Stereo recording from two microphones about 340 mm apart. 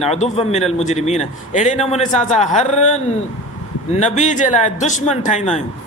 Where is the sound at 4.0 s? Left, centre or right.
Left.